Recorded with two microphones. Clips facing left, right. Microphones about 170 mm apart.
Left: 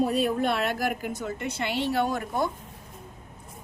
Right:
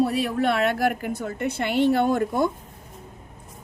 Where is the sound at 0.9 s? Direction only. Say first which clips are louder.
Right 4 dB; 55° right (ahead or behind).